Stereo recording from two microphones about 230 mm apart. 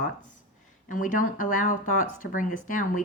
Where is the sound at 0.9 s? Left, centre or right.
Left.